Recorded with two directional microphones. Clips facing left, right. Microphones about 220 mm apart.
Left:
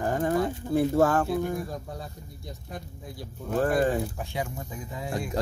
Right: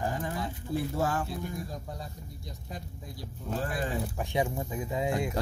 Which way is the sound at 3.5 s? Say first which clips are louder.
Left 9 dB; 55° left (ahead or behind).